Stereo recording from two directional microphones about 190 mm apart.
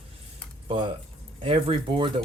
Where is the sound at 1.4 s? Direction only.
25° right (ahead or behind).